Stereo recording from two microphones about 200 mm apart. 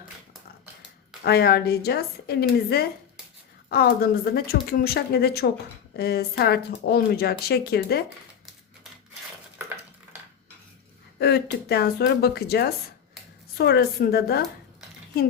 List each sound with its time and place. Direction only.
1.2 s speech: 50° left (ahead or behind)
9.6 s stir: 10° right (ahead or behind)
11.2 s speech: 55° left (ahead or behind)